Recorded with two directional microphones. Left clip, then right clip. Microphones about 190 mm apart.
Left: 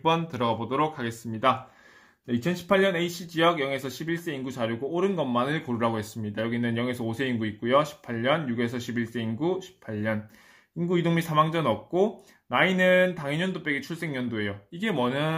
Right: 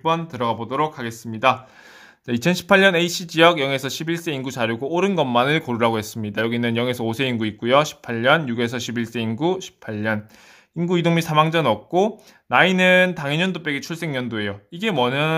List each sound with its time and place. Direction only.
0.0 s speech: 10° right (ahead or behind); by 1.6 s 25° right (ahead or behind)
2.2 s speech: 45° right (ahead or behind)